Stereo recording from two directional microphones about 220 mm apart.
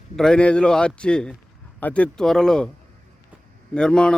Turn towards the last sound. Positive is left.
turn(degrees=5)  # may be behind; listen again after turning